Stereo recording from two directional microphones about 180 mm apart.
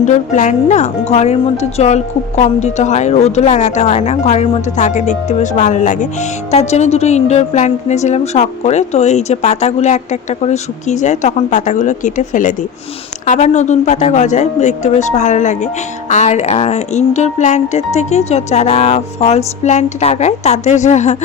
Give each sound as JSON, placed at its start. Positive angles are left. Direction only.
{"t": 0.0, "sound": "speech", "side_deg": 40}